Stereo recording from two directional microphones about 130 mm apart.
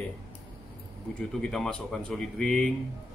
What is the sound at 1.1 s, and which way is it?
Speech, 5° left (ahead or behind).